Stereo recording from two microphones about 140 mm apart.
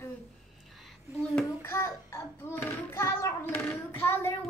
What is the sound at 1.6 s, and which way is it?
Child singing, 20° left (ahead or behind).